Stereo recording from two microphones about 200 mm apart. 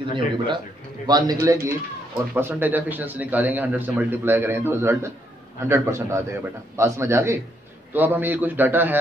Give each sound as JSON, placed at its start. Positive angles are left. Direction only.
{"t": 1.0, "sound": "a man's voice", "side_deg": -20}